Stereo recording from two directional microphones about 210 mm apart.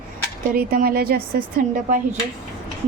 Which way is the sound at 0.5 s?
45° right (ahead or behind).